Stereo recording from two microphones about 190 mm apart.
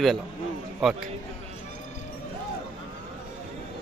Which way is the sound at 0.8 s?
Centre (ahead or behind).